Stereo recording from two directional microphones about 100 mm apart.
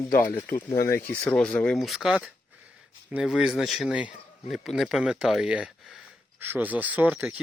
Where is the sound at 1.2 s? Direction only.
10° left (ahead or behind).